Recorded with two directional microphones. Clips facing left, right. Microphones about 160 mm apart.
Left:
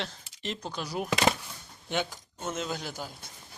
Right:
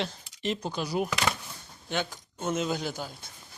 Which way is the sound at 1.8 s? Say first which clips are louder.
Even; 15° left (ahead or behind).